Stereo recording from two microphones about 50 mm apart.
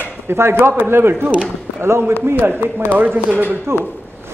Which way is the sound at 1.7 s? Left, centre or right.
Right.